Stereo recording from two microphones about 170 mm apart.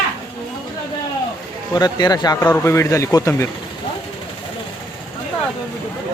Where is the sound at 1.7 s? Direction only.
25° left (ahead or behind).